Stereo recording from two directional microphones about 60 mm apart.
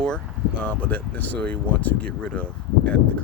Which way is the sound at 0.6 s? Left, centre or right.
Left.